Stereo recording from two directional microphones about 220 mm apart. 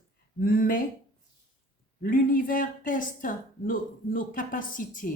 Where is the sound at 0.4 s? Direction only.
40° left (ahead or behind).